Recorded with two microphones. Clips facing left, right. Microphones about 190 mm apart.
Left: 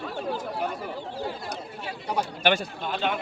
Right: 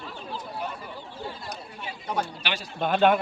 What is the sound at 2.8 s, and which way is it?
Speech, 55° right (ahead or behind).